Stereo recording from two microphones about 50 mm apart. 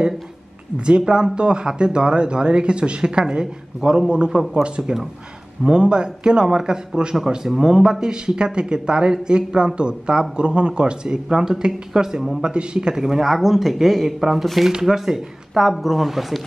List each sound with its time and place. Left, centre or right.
0.7 s speech: centre